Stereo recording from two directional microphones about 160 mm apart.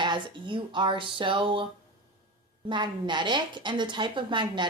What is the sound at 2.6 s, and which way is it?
A woman's voice, 30° right (ahead or behind).